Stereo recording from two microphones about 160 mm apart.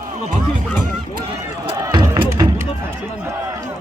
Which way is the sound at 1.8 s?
25° right (ahead or behind).